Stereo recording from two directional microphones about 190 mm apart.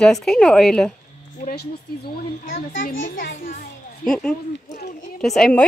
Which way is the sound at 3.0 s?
45° left (ahead or behind).